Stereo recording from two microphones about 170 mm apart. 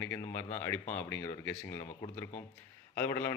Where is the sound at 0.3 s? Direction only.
15° left (ahead or behind).